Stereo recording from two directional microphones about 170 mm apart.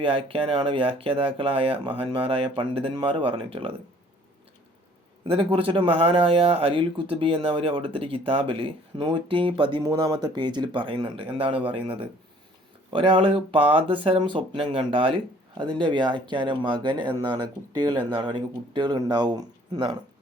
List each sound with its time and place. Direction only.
0.0 s speech: 30° right (ahead or behind)
5.3 s speech: 30° right (ahead or behind)